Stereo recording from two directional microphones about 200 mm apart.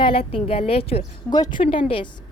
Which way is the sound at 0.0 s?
30° left (ahead or behind).